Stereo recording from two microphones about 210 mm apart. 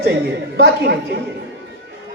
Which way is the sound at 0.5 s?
50° right (ahead or behind).